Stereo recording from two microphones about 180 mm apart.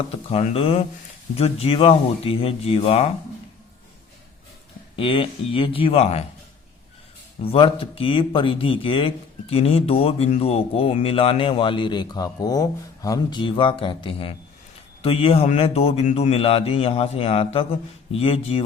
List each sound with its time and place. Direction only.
0.1 s speech: 30° left (ahead or behind)
4.9 s speech: 30° left (ahead or behind)
7.4 s speech: 30° left (ahead or behind)